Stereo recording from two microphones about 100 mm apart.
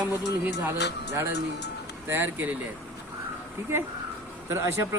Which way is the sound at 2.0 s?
20° right (ahead or behind).